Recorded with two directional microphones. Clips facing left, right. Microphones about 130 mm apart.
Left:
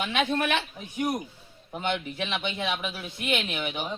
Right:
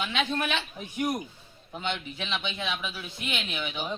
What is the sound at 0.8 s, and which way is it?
Speech, centre (ahead or behind).